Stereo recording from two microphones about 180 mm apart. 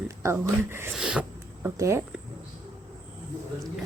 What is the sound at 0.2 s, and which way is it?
Speech, 15° right (ahead or behind).